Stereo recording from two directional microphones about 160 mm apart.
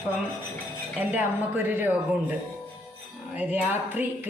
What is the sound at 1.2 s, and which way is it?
A woman's voice, 15° right (ahead or behind).